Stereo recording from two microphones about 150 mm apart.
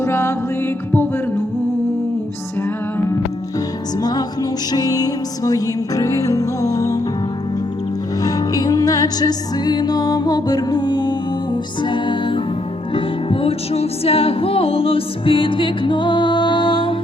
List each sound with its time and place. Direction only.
0.0 s music: 15° left (ahead or behind)
4.7 s music: 25° left (ahead or behind)
8.2 s music: 25° left (ahead or behind)